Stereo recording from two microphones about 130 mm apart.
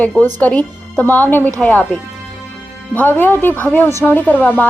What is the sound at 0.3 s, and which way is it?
A woman's voice, 10° left (ahead or behind).